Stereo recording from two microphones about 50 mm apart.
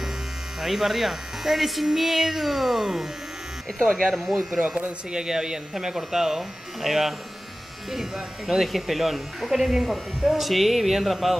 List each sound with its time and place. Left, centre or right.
0.6 s speech: centre
4.6 s speech: right; by 11.3 s centre